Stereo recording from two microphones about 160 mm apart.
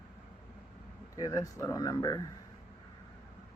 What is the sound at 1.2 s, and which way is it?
A man's voice, 20° left (ahead or behind).